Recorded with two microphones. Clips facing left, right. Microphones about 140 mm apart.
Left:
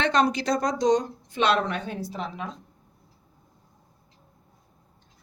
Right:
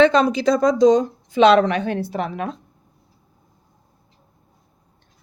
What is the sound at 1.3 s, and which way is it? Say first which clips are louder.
A woman's voice: right 10 dB; 90° right.